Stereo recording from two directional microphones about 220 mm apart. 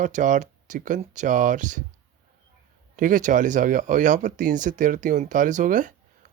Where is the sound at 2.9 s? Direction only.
35° right (ahead or behind).